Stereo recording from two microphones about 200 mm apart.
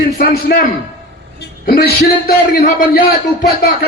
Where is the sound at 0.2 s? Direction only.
50° left (ahead or behind).